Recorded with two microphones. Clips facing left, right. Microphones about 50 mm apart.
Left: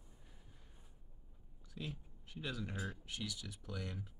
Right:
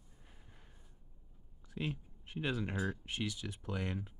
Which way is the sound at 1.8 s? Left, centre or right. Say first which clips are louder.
Right 7 dB; right.